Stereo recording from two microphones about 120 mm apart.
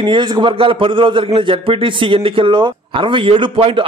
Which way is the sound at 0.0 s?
40° right (ahead or behind).